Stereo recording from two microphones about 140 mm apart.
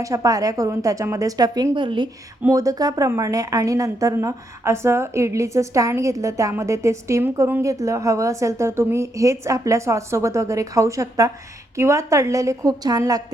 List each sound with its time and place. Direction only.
0.0 s a woman's voice: 25° right (ahead or behind)
2.5 s a woman's voice: 25° right (ahead or behind)